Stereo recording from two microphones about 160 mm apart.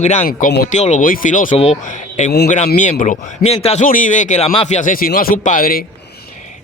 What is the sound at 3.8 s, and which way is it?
Speech, 55° left (ahead or behind).